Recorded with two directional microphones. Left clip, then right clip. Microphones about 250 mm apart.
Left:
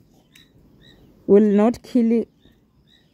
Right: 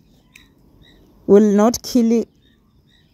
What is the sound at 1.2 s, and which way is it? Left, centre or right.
Speech, centre.